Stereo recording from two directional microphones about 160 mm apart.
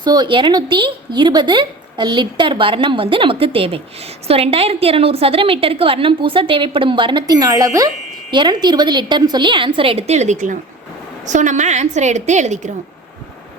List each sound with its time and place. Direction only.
0.0 s a woman's voice: 25° right (ahead or behind); by 12.7 s 45° right (ahead or behind)